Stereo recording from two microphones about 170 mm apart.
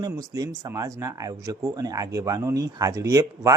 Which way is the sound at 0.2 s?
20° right (ahead or behind).